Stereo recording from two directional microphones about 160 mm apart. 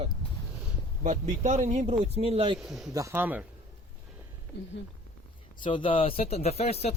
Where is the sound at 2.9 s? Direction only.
15° right (ahead or behind).